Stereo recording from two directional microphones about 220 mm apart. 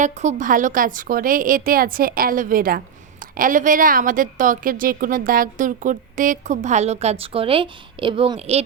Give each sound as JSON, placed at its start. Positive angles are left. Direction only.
{"t": 0.0, "sound": "a woman's voice", "side_deg": -35}